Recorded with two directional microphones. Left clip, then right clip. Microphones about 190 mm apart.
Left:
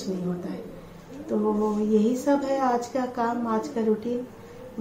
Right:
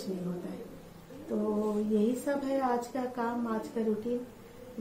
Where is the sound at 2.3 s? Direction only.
10° left (ahead or behind).